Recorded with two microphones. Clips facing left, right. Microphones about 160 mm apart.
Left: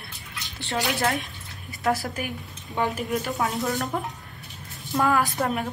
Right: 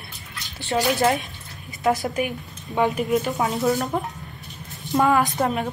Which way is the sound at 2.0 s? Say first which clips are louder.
Right 6 dB; centre (ahead or behind).